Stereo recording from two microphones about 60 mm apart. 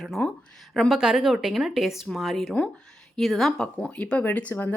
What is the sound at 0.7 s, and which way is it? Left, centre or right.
A woman's voice, centre.